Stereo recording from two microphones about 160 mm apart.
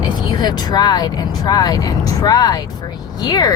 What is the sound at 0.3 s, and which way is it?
Speech, 25° left (ahead or behind).